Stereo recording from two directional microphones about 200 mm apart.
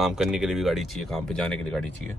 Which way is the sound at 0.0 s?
Centre (ahead or behind).